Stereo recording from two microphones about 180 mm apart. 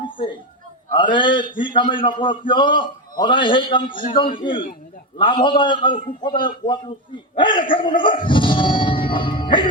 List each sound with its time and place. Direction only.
0.0 s a sound: 25° left (ahead or behind)
0.9 s a man's voice: 25° left (ahead or behind)
8.3 s music: 25° left (ahead or behind)